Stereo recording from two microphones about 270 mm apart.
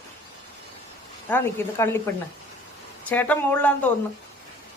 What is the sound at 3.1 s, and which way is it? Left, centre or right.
Speech, centre.